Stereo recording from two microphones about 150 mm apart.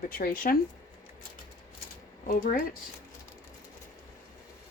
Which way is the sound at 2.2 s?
65° left (ahead or behind).